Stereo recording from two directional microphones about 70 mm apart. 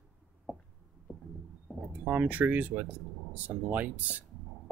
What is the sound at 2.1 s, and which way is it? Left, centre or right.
Speech, right.